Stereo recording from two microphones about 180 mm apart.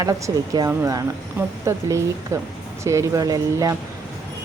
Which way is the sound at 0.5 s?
20° right (ahead or behind).